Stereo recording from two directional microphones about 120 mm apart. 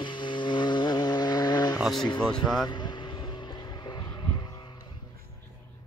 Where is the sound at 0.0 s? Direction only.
40° left (ahead or behind).